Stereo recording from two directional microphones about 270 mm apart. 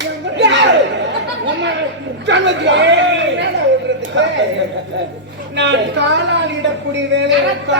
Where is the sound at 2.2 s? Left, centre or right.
Right.